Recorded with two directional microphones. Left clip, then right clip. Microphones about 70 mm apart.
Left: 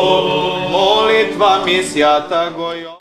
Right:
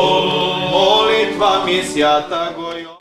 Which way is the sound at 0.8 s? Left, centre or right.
Centre.